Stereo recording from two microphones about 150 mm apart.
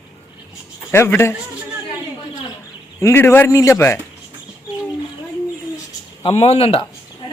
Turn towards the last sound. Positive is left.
turn(degrees=40)  # may be behind; listen again after turning